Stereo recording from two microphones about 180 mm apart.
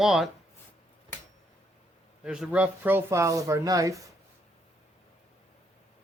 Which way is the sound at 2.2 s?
5° right (ahead or behind).